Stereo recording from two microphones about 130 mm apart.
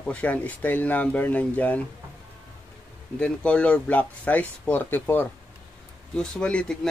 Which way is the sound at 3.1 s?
10° left (ahead or behind).